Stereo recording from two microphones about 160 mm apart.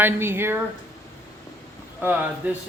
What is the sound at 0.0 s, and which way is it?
Speech, 15° right (ahead or behind).